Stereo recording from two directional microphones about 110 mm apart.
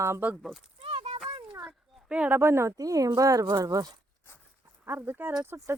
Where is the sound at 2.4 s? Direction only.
25° right (ahead or behind).